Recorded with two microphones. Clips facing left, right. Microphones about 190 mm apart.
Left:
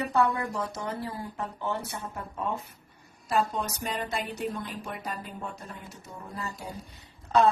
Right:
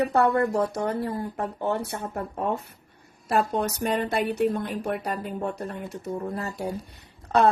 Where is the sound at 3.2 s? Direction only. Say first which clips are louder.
Right 4 dB; 60° right (ahead or behind).